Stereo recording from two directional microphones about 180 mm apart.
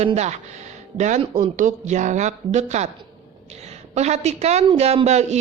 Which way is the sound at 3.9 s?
40° right (ahead or behind).